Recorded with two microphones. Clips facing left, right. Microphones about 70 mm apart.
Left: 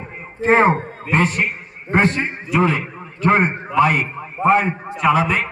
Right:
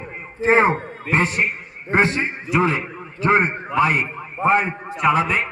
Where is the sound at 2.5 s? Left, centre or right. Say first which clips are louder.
Left 2 dB; centre.